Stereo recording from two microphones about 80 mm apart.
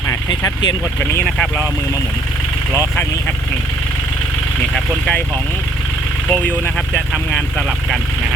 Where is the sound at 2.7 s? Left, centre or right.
Left.